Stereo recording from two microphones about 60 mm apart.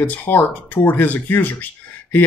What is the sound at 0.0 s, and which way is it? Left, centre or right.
Speech, left.